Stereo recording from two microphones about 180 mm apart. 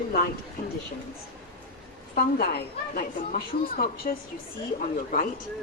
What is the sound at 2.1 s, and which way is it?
A woman's voice, 55° left (ahead or behind).